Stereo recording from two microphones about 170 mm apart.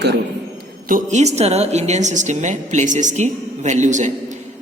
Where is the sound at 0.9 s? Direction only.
50° right (ahead or behind).